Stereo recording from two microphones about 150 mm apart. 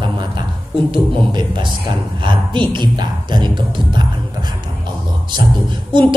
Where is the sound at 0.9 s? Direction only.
30° right (ahead or behind).